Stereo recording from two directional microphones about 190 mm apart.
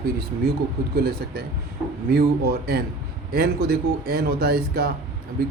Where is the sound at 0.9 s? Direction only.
55° right (ahead or behind).